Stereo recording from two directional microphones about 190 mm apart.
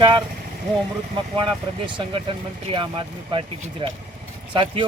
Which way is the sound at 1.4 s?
25° right (ahead or behind).